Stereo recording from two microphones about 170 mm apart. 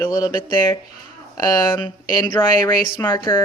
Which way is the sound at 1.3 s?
25° left (ahead or behind).